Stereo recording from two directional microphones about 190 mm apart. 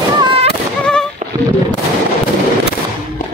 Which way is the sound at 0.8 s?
5° left (ahead or behind).